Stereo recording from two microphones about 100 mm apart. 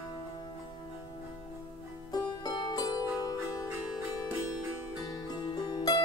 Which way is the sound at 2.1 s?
40° left (ahead or behind).